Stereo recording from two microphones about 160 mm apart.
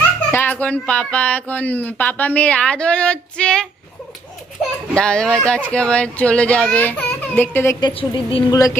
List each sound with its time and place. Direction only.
0.3 s speech: 15° left (ahead or behind)
4.9 s speech: 5° left (ahead or behind)
7.8 s a woman's voice: 30° left (ahead or behind)
8.5 s speech: 20° left (ahead or behind)